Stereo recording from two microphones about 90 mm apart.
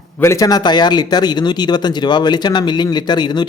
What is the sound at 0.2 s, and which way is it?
Speech, 35° left (ahead or behind).